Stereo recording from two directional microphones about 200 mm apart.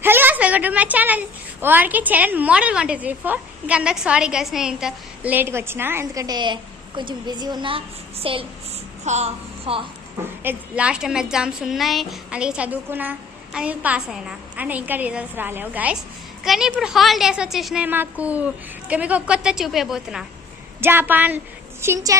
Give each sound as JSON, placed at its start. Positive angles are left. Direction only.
{"t": 0.0, "sound": "a sound", "side_deg": -10}
{"t": 1.6, "sound": "a woman's voice", "side_deg": -10}
{"t": 10.4, "sound": "a woman's voice", "side_deg": -10}